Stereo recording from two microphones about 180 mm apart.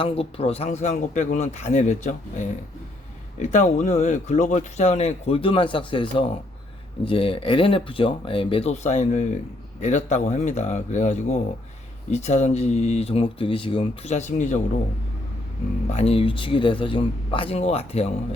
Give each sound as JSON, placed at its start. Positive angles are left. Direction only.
{"t": 0.0, "sound": "speech", "side_deg": 30}
{"t": 15.9, "sound": "speech", "side_deg": 35}